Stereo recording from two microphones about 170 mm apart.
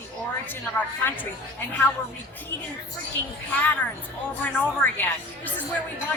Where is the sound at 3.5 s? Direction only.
10° left (ahead or behind).